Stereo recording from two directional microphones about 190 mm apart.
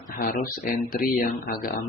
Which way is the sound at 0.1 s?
45° left (ahead or behind).